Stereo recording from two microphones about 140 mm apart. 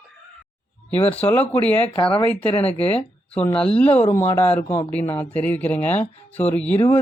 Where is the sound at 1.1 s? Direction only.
10° left (ahead or behind).